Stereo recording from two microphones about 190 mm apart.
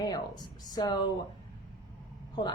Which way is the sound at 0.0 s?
20° left (ahead or behind).